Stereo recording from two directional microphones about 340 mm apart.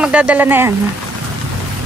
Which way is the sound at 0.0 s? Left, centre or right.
Centre.